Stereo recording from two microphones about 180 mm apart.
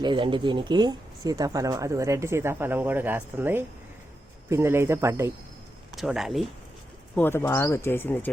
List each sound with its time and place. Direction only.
0.0 s speech: 25° right (ahead or behind)
6.0 s speech: centre (ahead or behind)
7.2 s speech: 10° left (ahead or behind)